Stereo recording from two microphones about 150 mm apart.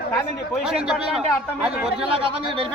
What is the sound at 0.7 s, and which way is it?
A man's voice, 5° right (ahead or behind).